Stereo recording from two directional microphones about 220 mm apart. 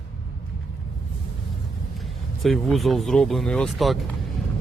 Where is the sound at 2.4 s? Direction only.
Centre (ahead or behind).